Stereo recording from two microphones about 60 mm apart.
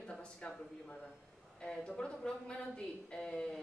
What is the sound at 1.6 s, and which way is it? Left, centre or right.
A woman's voice, centre.